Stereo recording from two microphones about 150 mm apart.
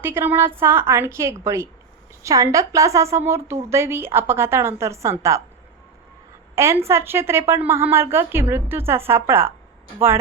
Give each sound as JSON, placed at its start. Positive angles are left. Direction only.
{"t": 0.0, "sound": "a woman's voice", "side_deg": -15}
{"t": 6.8, "sound": "a woman's voice", "side_deg": -15}